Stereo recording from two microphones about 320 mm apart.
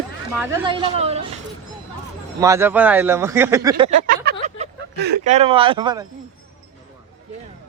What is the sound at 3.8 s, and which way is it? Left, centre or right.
Speech, right.